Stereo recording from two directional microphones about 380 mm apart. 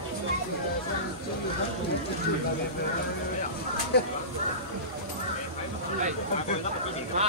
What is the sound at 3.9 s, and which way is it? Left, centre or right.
Speech, left.